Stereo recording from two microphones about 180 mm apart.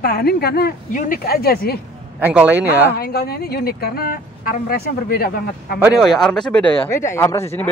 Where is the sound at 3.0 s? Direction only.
60° left (ahead or behind).